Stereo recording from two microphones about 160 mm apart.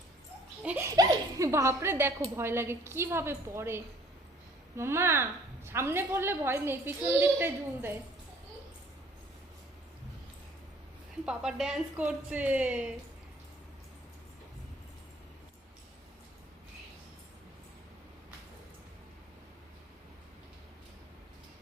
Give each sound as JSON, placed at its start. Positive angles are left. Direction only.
{"t": 0.6, "sound": "baby laughter", "side_deg": -10}
{"t": 0.9, "sound": "chuckle", "side_deg": -20}
{"t": 2.3, "sound": "a woman's voice", "side_deg": -15}
{"t": 11.3, "sound": "a woman's voice", "side_deg": -5}